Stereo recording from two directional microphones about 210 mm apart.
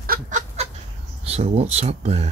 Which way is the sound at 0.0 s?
45° right (ahead or behind).